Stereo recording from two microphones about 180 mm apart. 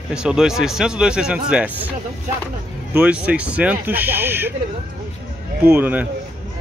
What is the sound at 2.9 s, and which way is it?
Speech, 5° right (ahead or behind).